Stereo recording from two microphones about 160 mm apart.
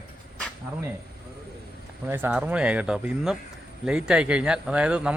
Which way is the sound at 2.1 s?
15° right (ahead or behind).